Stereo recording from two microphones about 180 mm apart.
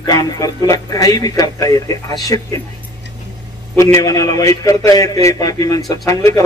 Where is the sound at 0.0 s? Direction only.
20° left (ahead or behind).